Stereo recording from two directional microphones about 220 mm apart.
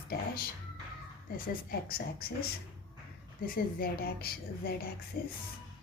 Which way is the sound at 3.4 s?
40° left (ahead or behind).